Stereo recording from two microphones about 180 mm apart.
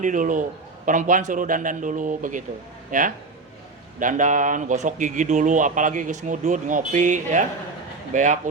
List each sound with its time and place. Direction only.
0.0 s speech: 45° right (ahead or behind)